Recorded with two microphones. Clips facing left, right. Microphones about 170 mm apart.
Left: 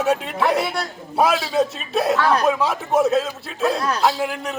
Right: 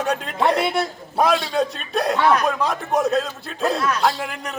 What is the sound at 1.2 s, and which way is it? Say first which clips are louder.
A man's voice: left 1 dB; 5° left (ahead or behind).